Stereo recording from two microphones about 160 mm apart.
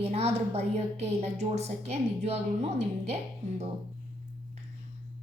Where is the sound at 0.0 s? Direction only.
40° right (ahead or behind).